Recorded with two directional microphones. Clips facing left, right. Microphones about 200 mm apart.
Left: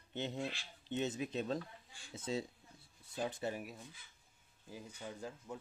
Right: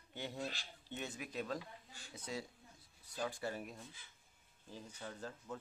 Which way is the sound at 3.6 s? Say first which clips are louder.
Left 1 dB; 10° left (ahead or behind).